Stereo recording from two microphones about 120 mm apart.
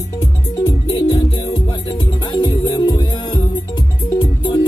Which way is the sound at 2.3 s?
35° left (ahead or behind).